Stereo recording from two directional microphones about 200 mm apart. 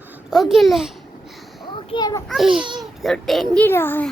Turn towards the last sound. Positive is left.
turn(degrees=10)  # may be behind; listen again after turning